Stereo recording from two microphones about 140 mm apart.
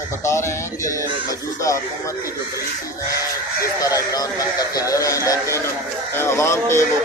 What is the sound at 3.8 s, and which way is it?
Speech, 25° left (ahead or behind).